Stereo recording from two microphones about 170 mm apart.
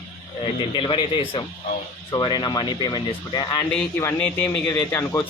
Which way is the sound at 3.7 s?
5° left (ahead or behind).